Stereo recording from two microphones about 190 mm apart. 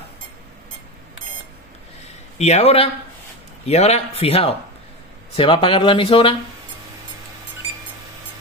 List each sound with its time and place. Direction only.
2.3 s speech: 35° left (ahead or behind)